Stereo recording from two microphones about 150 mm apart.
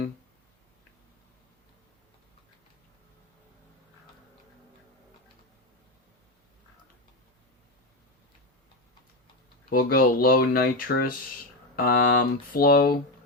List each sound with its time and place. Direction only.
9.6 s speech: 75° left (ahead or behind)